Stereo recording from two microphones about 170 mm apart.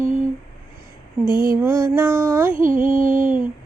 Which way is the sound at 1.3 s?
55° right (ahead or behind).